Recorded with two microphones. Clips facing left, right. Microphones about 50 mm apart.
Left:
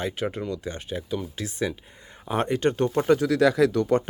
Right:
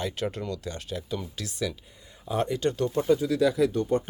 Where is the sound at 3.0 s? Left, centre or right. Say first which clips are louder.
Left 3 dB; left.